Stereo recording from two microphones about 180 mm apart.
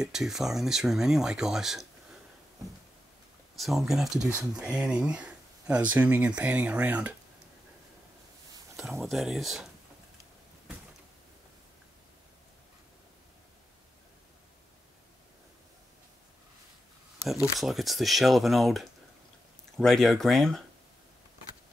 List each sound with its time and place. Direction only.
0.0 s speech: 5° right (ahead or behind)
3.5 s speech: centre (ahead or behind)
8.7 s speech: centre (ahead or behind)
17.3 s speech: centre (ahead or behind)